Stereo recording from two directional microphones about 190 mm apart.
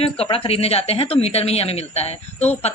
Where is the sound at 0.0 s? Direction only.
30° left (ahead or behind).